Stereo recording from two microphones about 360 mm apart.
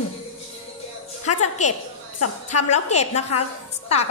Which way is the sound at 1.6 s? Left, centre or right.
Centre.